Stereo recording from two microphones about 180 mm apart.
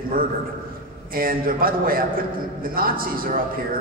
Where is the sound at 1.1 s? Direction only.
50° right (ahead or behind).